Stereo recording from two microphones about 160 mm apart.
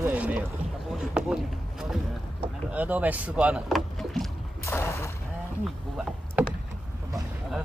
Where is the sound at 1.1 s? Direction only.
5° right (ahead or behind).